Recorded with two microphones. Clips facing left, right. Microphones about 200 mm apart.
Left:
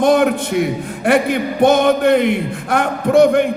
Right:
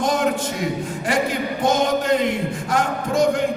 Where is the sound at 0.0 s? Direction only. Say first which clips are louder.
Left 7 dB; 60° left (ahead or behind).